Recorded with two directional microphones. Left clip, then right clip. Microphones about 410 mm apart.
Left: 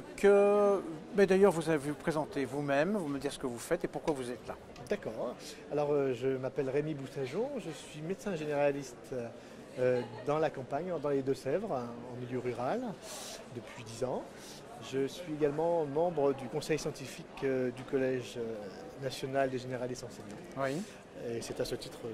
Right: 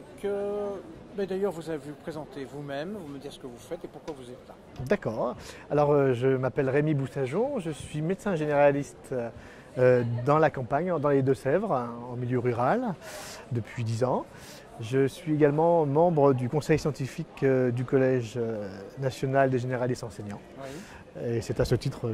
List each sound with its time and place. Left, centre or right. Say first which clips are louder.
0.2 s a man's voice: left 6 dB; left
4.8 s speech: right 9 dB; right